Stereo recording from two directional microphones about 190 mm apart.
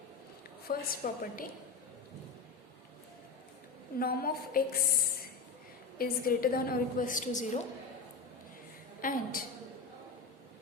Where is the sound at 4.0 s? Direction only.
50° left (ahead or behind).